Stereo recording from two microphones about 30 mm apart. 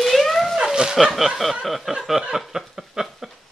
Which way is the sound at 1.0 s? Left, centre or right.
Centre.